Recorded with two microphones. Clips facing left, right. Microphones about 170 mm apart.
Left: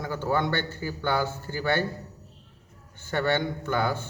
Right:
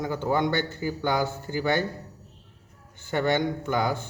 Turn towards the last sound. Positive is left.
turn(degrees=-15)  # may be behind; listen again after turning